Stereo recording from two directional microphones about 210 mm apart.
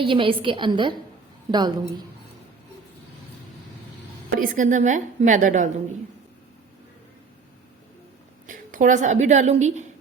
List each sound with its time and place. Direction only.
0.0 s a woman's voice: 25° right (ahead or behind)
4.3 s a woman's voice: 40° right (ahead or behind)
8.4 s a woman's voice: 40° right (ahead or behind)